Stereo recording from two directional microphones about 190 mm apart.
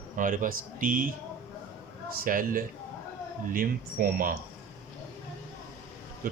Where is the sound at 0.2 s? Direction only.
45° right (ahead or behind).